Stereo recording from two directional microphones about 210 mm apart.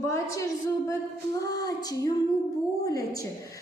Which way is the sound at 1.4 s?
20° left (ahead or behind).